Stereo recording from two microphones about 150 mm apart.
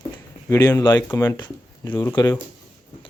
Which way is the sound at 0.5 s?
20° left (ahead or behind).